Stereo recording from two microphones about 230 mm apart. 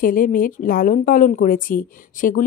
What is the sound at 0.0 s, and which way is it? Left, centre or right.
Speech, left.